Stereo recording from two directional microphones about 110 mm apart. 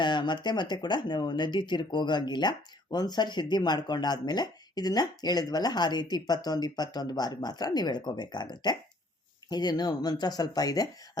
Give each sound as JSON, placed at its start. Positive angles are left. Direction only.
{"t": 0.0, "sound": "speech", "side_deg": 45}